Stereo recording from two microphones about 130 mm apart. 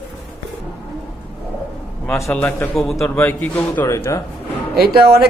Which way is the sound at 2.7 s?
Centre (ahead or behind).